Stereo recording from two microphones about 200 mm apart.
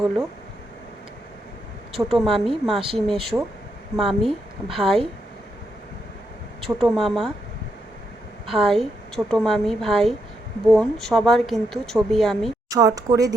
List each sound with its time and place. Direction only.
2.0 s speech: centre (ahead or behind)
6.7 s speech: centre (ahead or behind)
8.4 s speech: centre (ahead or behind)
12.7 s speech: 15° right (ahead or behind)